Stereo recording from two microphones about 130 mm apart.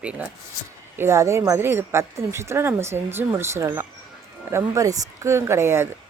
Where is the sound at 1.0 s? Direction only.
20° right (ahead or behind).